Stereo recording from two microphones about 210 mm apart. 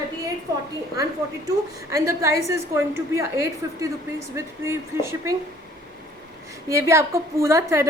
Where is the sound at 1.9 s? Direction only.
15° right (ahead or behind).